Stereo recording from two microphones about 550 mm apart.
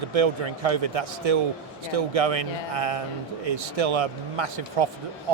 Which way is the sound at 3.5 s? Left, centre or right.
Right.